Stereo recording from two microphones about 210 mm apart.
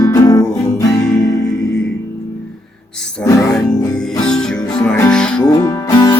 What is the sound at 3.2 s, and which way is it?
Music, 15° left (ahead or behind).